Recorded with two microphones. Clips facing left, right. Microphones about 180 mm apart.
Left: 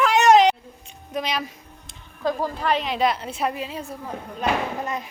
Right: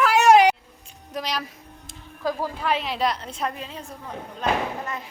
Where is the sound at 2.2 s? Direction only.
5° right (ahead or behind); by 4.6 s 10° left (ahead or behind).